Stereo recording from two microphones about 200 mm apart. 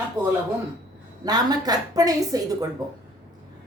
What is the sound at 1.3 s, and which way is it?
A woman's voice, 20° right (ahead or behind).